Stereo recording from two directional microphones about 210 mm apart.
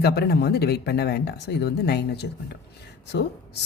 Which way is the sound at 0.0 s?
50° left (ahead or behind).